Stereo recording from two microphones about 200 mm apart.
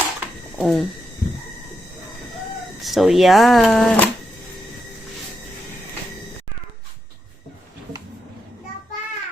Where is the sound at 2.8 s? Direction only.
Centre (ahead or behind).